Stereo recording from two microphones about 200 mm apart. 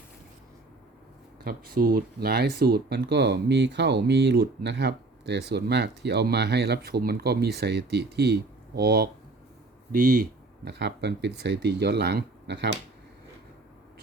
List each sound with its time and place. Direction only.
1.5 s speech: 45° right (ahead or behind)